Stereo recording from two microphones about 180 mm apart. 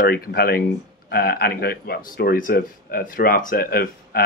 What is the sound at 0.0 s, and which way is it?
Speech, 60° left (ahead or behind).